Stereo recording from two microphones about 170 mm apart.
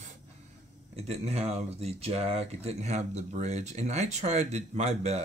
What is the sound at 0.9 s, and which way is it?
Speech, 40° right (ahead or behind).